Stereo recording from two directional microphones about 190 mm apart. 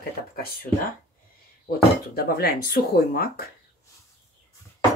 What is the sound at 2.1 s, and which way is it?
Speech, 55° left (ahead or behind).